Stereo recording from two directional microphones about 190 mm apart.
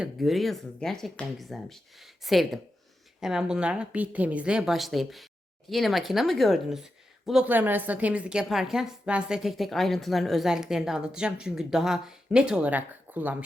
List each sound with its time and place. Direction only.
0.0 s speech: centre (ahead or behind)